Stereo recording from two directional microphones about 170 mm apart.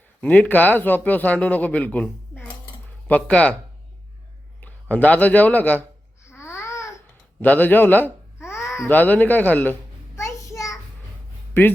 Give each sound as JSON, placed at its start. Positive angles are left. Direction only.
{"t": 0.2, "sound": "a man's voice", "side_deg": 10}
{"t": 4.6, "sound": "speech", "side_deg": 10}
{"t": 6.2, "sound": "babbling", "side_deg": 15}
{"t": 8.9, "sound": "a man's voice", "side_deg": 10}
{"t": 10.2, "sound": "child singing", "side_deg": 20}